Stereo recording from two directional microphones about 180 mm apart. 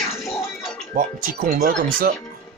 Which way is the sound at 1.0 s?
50° right (ahead or behind).